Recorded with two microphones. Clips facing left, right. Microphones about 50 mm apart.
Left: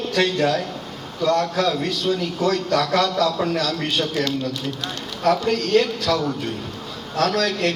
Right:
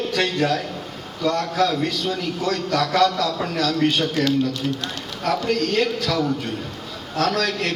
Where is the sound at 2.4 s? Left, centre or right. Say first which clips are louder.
Left 2 dB; centre.